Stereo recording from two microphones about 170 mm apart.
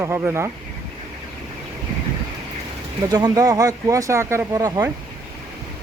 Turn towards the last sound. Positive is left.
turn(degrees=-20)  # may be behind; listen again after turning